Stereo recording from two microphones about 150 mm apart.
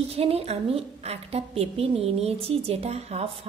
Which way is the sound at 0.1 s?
40° right (ahead or behind).